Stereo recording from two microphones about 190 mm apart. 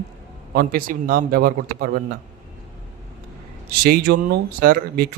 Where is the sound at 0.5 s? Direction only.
50° right (ahead or behind).